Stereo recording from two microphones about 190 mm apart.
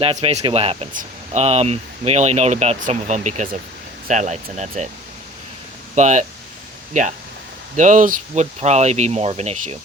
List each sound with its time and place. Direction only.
0.0 s speech: 30° right (ahead or behind)
6.0 s speech: 40° right (ahead or behind)
7.8 s speech: 40° right (ahead or behind)